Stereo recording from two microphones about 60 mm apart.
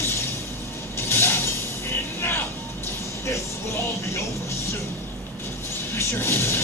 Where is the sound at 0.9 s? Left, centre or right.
Left.